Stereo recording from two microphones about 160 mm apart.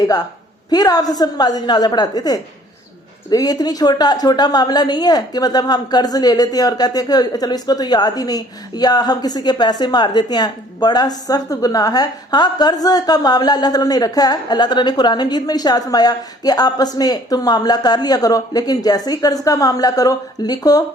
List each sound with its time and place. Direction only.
0.7 s a woman's voice: 25° left (ahead or behind)